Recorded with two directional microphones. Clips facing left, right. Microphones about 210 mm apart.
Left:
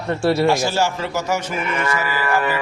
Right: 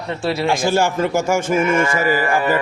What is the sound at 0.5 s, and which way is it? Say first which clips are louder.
A man's voice: right 3 dB; 50° right (ahead or behind).